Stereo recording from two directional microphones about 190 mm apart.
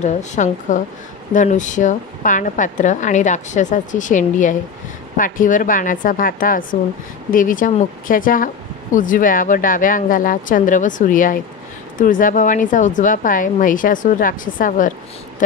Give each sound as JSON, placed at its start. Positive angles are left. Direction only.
{"t": 0.0, "sound": "a woman's voice", "side_deg": 40}